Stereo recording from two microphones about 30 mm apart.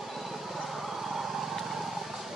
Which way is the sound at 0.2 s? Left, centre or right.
Centre.